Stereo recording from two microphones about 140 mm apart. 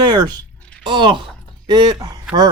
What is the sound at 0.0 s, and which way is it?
Speech, 30° right (ahead or behind).